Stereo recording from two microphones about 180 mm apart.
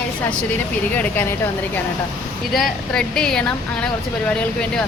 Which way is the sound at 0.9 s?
10° left (ahead or behind).